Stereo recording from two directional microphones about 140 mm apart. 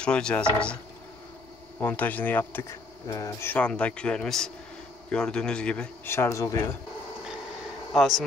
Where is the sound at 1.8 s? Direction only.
10° left (ahead or behind).